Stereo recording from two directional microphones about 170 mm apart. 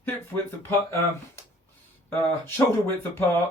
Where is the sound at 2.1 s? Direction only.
15° left (ahead or behind).